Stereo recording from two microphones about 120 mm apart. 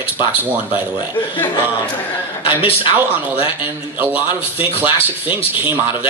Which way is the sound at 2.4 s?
50° left (ahead or behind).